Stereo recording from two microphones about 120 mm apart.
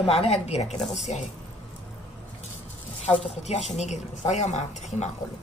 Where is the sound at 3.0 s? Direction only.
65° left (ahead or behind).